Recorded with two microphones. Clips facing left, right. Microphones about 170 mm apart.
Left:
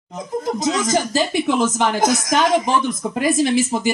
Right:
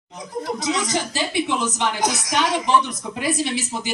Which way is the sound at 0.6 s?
45° left (ahead or behind).